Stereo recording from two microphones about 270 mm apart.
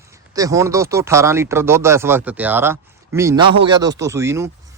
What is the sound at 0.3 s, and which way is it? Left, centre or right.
Speech, centre.